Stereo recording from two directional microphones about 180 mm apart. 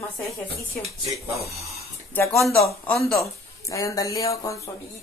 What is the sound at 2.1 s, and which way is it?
Speech, 15° left (ahead or behind).